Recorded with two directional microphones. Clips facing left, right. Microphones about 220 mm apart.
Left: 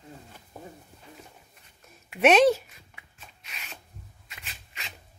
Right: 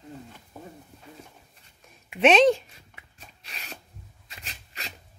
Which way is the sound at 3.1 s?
35° right (ahead or behind).